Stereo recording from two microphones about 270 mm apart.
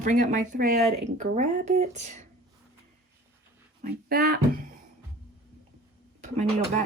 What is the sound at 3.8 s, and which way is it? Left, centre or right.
Speech, right.